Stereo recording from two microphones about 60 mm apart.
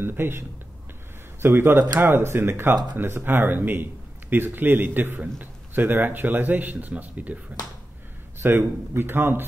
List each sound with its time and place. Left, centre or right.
0.0 s a man's voice: right
8.4 s a man's voice: right